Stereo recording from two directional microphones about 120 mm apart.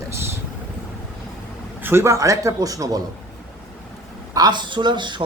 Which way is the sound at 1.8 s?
20° right (ahead or behind).